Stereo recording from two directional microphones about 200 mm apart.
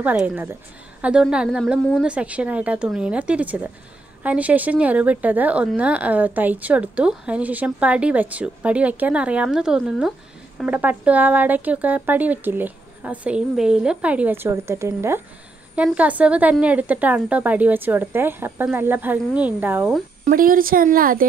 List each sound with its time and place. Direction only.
0.0 s a woman's voice: 10° right (ahead or behind)
20.2 s speech: 45° right (ahead or behind)